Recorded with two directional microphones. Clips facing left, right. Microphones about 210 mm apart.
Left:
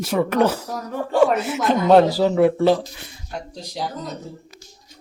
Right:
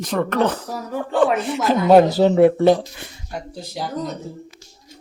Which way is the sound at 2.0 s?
25° right (ahead or behind).